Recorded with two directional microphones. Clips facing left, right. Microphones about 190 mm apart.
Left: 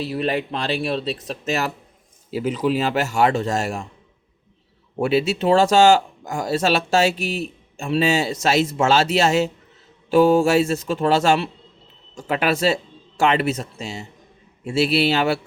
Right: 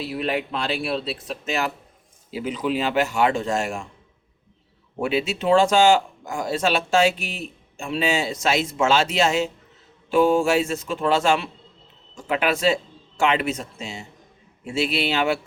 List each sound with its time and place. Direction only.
0.0 s speech: 40° left (ahead or behind)
4.9 s speech: 40° left (ahead or behind)